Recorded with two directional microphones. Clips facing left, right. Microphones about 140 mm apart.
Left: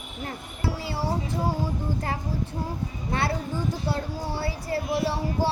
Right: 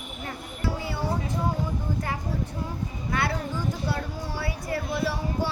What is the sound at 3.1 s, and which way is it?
Speech, 25° left (ahead or behind).